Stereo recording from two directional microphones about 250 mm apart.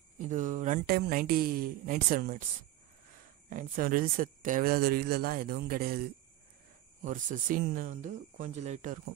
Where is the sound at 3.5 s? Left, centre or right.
Right.